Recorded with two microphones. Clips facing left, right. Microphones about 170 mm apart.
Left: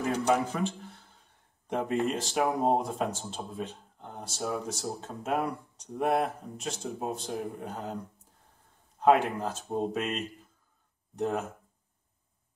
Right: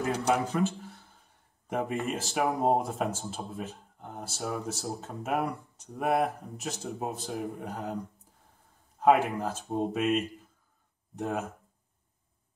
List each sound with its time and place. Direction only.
0.3 s speech: 5° right (ahead or behind)
9.0 s speech: 5° right (ahead or behind)
11.1 s speech: 5° right (ahead or behind)